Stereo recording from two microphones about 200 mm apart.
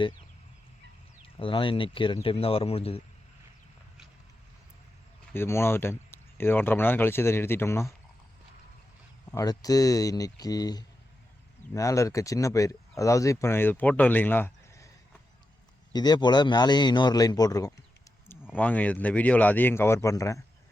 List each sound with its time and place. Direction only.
1.2 s a man's voice: 25° left (ahead or behind)
5.3 s speech: 10° left (ahead or behind)
9.3 s speech: 20° left (ahead or behind)
15.9 s a man's voice: 20° left (ahead or behind)
18.5 s speech: 5° left (ahead or behind)